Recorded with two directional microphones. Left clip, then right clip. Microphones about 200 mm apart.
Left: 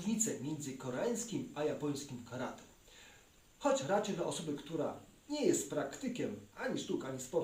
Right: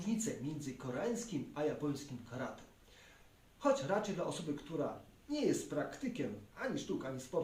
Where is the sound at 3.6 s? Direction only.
15° right (ahead or behind).